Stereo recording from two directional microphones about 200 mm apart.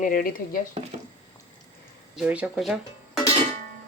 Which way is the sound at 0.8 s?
30° right (ahead or behind).